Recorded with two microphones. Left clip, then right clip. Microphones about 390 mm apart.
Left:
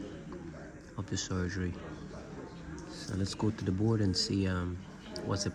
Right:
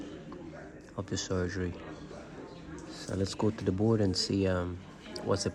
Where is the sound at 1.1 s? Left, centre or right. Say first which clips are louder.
Right 3 dB; centre.